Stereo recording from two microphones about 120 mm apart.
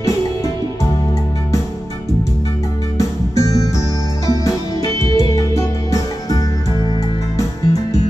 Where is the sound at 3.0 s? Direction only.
25° left (ahead or behind).